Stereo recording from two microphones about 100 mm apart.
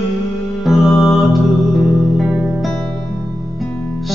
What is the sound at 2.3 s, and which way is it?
Music, 5° right (ahead or behind).